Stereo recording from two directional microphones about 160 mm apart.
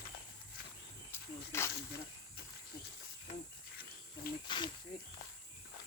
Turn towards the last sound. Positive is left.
turn(degrees=70)  # may be behind; listen again after turning